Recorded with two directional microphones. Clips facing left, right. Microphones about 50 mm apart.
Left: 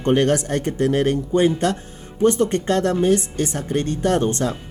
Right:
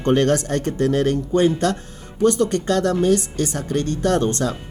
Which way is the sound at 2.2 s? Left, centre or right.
Left.